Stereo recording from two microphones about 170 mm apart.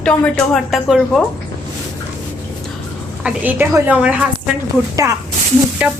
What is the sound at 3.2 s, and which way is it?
A woman's voice, 10° right (ahead or behind).